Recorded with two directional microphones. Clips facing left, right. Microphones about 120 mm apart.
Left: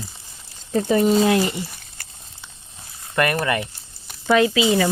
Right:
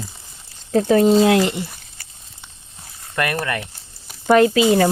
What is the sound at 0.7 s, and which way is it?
Speech, 70° right (ahead or behind).